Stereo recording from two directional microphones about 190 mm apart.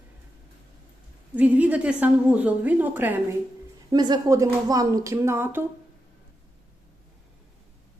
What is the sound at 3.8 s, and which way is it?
A woman's voice, 25° right (ahead or behind).